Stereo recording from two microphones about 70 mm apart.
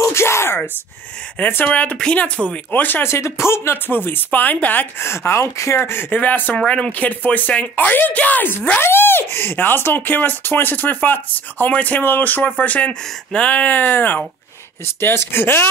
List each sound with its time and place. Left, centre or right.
0.0 s a sound: left
1.4 s speech: left
3.1 s speech: left
5.0 s speech: left
5.8 s speech: left